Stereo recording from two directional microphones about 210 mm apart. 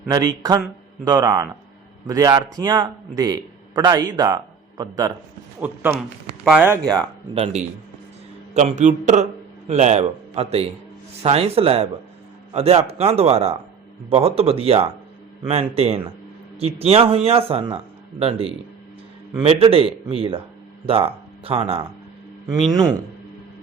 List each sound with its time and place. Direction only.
0.1 s a man's voice: 15° right (ahead or behind)
7.3 s a man's voice: 30° right (ahead or behind)